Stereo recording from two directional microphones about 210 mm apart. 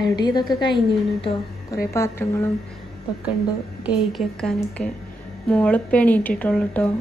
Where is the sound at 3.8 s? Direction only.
Centre (ahead or behind).